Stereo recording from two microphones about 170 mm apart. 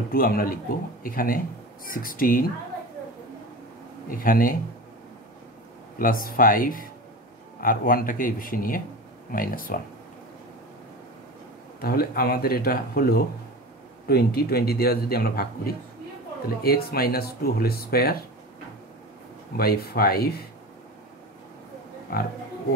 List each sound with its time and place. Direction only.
0.1 s a man's voice: 60° left (ahead or behind)
4.1 s a man's voice: 55° left (ahead or behind)
5.9 s a man's voice: 55° left (ahead or behind)
11.8 s a man's voice: 65° left (ahead or behind)
19.5 s a man's voice: 65° left (ahead or behind)
22.1 s a man's voice: 65° left (ahead or behind)